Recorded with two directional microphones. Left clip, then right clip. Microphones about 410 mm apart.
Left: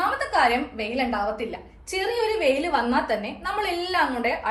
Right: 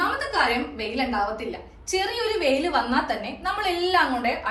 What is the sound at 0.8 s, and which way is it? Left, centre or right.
A woman's voice, centre.